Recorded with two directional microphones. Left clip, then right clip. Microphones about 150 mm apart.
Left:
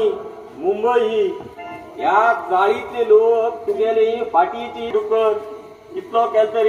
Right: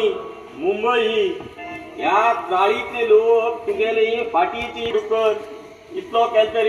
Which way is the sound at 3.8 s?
15° right (ahead or behind).